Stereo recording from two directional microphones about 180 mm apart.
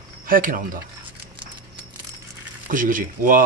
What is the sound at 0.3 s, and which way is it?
Speech, 50° right (ahead or behind).